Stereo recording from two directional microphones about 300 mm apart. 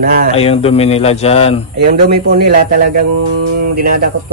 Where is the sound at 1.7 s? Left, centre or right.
Right.